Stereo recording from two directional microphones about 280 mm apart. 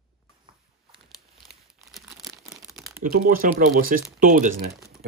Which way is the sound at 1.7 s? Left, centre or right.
Centre.